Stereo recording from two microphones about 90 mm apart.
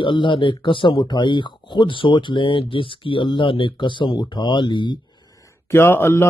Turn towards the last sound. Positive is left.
turn(degrees=25)  # may be behind; listen again after turning